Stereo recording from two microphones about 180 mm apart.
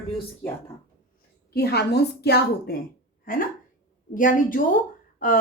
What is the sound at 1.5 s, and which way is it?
A woman's voice, 65° left (ahead or behind).